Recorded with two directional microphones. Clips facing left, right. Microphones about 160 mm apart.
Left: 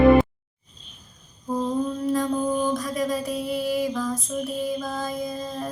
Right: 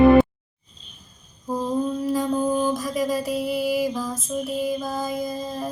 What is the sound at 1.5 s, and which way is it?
Mantra, 5° right (ahead or behind).